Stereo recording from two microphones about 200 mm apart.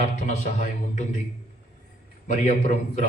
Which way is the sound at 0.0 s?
35° left (ahead or behind).